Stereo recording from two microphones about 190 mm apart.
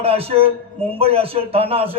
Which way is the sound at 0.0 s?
30° right (ahead or behind).